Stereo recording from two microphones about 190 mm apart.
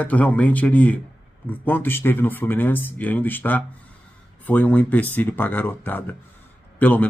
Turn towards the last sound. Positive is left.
turn(degrees=10)  # may be behind; listen again after turning